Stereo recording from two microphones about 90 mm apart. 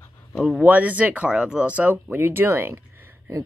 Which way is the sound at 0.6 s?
20° right (ahead or behind).